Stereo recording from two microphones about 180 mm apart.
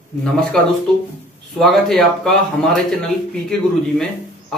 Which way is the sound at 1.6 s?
Centre (ahead or behind).